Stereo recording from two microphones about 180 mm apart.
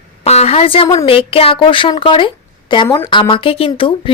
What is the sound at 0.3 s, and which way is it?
A woman's voice, 35° left (ahead or behind).